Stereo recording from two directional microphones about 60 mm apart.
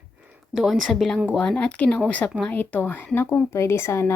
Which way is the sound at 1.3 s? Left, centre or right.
Left.